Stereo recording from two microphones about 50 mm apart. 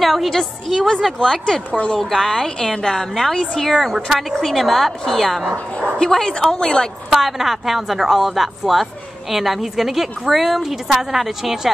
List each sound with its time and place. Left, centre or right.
0.0 s a woman's voice: centre
5.5 s dog: right
5.9 s a woman's voice: centre
7.1 s a woman's voice: centre